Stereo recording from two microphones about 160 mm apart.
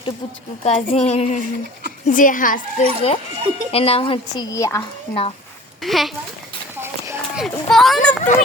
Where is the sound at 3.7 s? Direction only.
35° left (ahead or behind).